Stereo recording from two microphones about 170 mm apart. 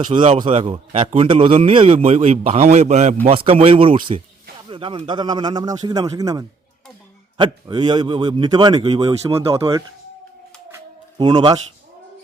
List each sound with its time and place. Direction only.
0.1 s a man's voice: 30° right (ahead or behind)
3.3 s a man's voice: 30° right (ahead or behind)
11.2 s a man's voice: 25° right (ahead or behind)